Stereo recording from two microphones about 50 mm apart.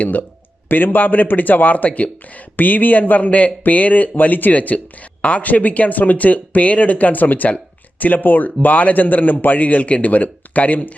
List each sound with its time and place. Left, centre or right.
0.0 s speech: left